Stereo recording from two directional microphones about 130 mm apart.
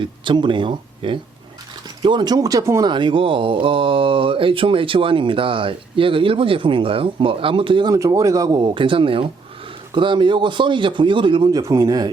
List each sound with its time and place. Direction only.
0.0 s speech: 40° right (ahead or behind)
2.9 s speech: 40° right (ahead or behind)
7.9 s speech: 25° right (ahead or behind)
8.6 s speech: 40° right (ahead or behind)